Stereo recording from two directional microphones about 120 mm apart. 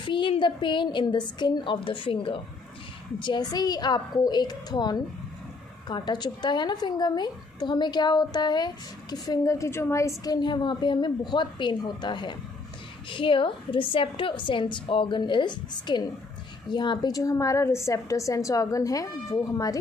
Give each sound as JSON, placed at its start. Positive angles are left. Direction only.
{"t": 0.0, "sound": "a woman's voice", "side_deg": 40}